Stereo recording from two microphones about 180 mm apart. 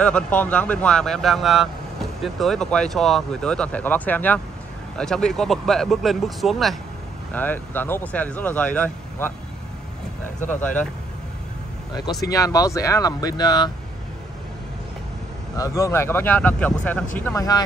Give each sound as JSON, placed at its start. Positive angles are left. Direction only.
{"t": 0.0, "sound": "speech", "side_deg": 5}
{"t": 10.6, "sound": "speech", "side_deg": 10}
{"t": 11.9, "sound": "speech", "side_deg": 20}
{"t": 15.5, "sound": "speech", "side_deg": 20}